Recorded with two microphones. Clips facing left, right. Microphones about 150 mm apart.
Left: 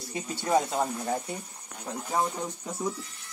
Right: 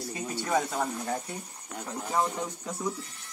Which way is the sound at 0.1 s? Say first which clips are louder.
Left 3 dB; 25° left (ahead or behind).